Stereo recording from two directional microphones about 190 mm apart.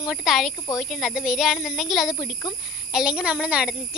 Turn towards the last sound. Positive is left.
turn(degrees=-5)  # may be behind; listen again after turning